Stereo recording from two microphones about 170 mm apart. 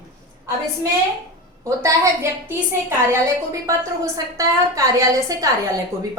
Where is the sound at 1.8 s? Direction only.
15° right (ahead or behind).